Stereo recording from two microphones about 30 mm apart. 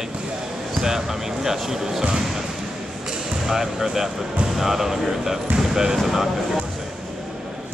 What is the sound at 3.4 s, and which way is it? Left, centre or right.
Speech, centre.